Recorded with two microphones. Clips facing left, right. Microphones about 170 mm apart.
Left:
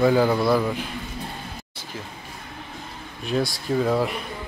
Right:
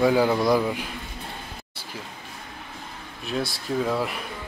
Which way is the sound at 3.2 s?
Centre (ahead or behind).